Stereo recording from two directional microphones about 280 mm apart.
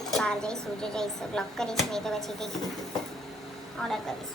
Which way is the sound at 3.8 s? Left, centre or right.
Centre.